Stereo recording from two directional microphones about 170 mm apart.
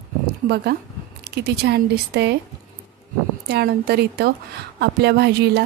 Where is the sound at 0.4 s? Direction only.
55° right (ahead or behind).